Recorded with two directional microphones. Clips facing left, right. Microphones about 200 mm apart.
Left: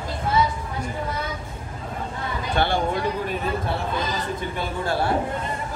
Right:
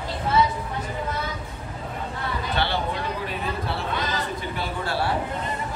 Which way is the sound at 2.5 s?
50° left (ahead or behind).